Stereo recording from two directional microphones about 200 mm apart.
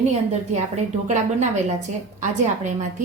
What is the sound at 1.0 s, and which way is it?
Speech, 35° right (ahead or behind).